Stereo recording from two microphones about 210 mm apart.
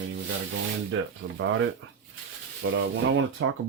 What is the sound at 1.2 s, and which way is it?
Speech, 65° right (ahead or behind).